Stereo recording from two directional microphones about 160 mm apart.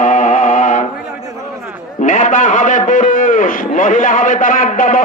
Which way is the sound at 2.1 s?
55° left (ahead or behind).